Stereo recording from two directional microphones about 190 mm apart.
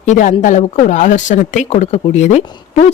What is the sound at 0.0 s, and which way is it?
Speech, 40° left (ahead or behind).